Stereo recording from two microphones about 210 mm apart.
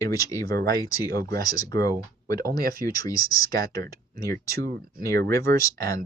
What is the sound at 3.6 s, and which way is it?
Speech, 15° left (ahead or behind).